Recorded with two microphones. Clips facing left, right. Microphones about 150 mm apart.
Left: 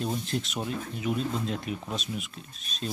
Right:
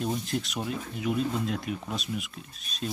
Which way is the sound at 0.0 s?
Centre (ahead or behind).